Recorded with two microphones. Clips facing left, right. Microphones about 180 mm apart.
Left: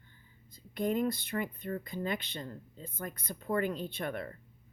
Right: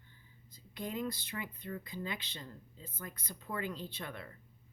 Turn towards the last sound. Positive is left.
turn(degrees=55)  # may be behind; listen again after turning